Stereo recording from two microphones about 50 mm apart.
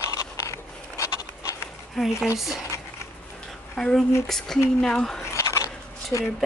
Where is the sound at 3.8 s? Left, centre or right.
Centre.